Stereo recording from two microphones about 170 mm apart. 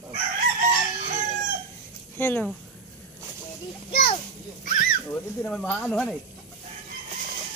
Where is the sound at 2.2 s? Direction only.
10° left (ahead or behind).